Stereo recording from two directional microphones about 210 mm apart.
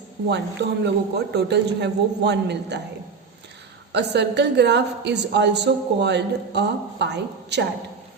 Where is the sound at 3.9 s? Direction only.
55° right (ahead or behind).